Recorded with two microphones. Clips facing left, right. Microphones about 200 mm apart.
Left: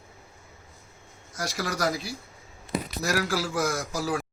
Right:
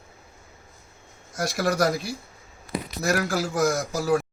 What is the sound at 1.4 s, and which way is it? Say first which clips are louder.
Speech: right 6 dB; 55° right (ahead or behind).